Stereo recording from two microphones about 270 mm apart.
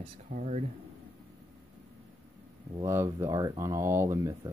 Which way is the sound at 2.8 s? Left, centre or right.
Centre.